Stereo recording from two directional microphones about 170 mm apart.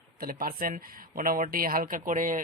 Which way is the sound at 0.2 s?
60° right (ahead or behind).